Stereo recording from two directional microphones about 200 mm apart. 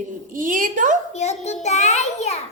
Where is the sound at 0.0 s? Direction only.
40° right (ahead or behind).